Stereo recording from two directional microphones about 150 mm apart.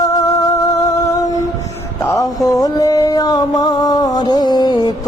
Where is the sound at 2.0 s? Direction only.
20° left (ahead or behind).